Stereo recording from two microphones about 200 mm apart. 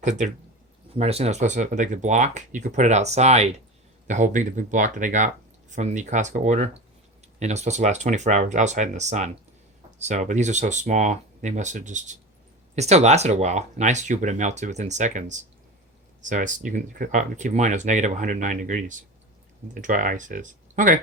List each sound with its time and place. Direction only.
0.0 s speech: 35° right (ahead or behind)